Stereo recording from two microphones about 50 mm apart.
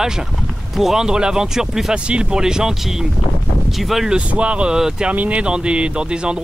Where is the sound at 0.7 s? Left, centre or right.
Centre.